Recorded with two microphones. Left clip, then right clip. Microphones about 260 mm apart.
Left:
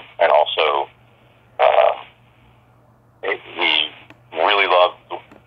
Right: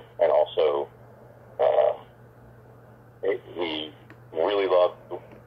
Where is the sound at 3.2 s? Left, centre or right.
Centre.